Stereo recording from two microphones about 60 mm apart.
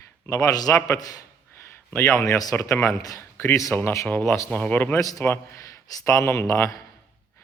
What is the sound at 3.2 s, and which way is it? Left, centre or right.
Speech, left.